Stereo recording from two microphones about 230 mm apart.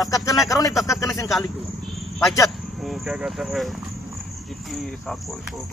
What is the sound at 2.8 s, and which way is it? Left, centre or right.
Speech, centre.